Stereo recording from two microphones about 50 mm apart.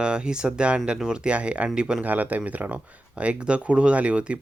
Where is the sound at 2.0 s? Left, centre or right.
Right.